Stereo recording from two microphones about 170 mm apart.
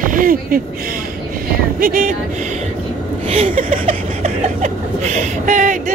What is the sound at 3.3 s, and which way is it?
Chuckle, 45° right (ahead or behind).